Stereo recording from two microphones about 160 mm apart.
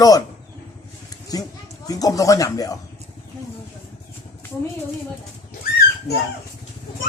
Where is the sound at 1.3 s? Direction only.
25° left (ahead or behind).